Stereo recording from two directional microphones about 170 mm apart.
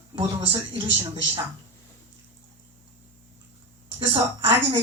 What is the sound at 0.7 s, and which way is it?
Speech, 35° right (ahead or behind).